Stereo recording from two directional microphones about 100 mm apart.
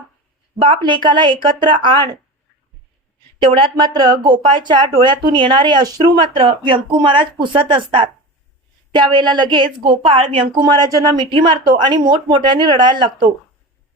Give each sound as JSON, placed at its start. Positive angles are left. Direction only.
{"t": 0.6, "sound": "speech", "side_deg": -55}
{"t": 3.4, "sound": "speech", "side_deg": -60}
{"t": 9.9, "sound": "speech", "side_deg": -70}
{"t": 11.3, "sound": "speech", "side_deg": -60}